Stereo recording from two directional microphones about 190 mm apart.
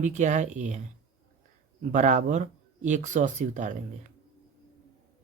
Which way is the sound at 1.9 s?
40° right (ahead or behind).